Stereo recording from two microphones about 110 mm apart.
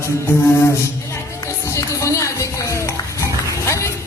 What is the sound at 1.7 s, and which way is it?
Music, 30° left (ahead or behind).